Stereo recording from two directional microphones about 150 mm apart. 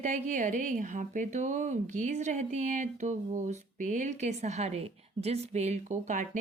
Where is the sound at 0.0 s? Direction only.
55° right (ahead or behind).